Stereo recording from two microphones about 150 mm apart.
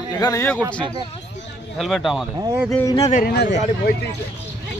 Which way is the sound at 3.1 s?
75° left (ahead or behind).